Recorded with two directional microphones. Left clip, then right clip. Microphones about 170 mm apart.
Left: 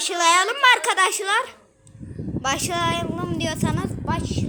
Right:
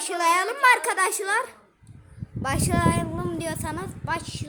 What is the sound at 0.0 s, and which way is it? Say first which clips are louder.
Speech: left 4 dB; centre (ahead or behind).